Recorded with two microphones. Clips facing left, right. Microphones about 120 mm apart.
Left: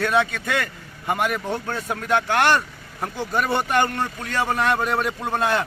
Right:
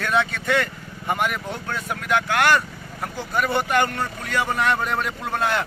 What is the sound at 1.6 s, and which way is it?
Speech, 25° left (ahead or behind).